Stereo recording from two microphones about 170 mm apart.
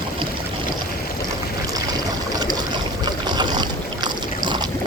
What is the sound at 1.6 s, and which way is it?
Trickle, 20° right (ahead or behind).